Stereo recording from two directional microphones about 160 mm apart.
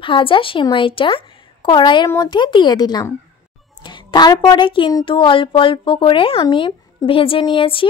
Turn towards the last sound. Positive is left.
turn(degrees=35)  # may be behind; listen again after turning